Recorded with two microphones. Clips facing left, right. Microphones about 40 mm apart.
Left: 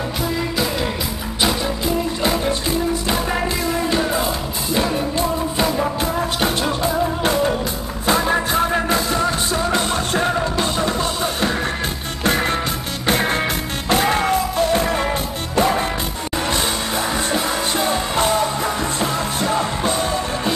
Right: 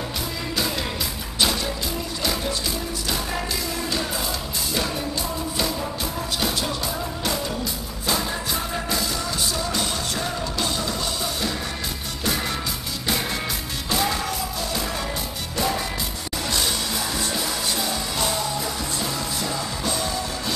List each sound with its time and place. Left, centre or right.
2.2 s music: left
5.6 s music: left
17.3 s music: left